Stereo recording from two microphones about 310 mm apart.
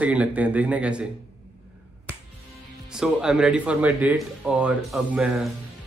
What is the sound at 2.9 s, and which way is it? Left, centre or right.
A man's voice, centre.